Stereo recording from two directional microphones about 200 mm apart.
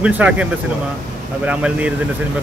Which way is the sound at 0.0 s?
5° right (ahead or behind).